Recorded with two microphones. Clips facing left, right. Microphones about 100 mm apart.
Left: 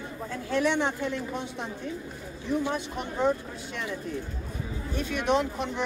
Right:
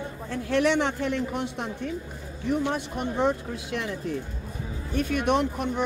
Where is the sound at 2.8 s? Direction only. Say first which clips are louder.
Right 3 dB; 65° right (ahead or behind).